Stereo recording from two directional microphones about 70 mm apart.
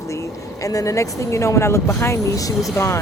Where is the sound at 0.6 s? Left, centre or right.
Left.